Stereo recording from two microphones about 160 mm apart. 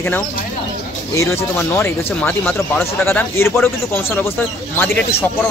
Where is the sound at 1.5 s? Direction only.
15° left (ahead or behind).